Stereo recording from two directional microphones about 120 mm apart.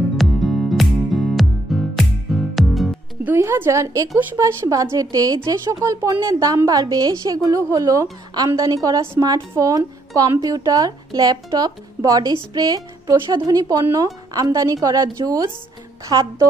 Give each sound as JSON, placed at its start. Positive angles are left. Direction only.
{"t": 0.2, "sound": "music", "side_deg": 0}
{"t": 3.3, "sound": "a woman's voice", "side_deg": -20}